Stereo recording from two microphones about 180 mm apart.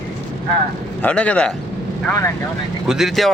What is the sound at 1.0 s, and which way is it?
Speech, 5° left (ahead or behind).